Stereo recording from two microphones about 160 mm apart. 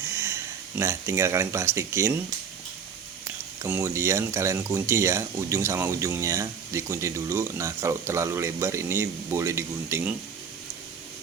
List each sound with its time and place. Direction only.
0.1 s speech: 15° right (ahead or behind)
3.8 s speech: 20° right (ahead or behind)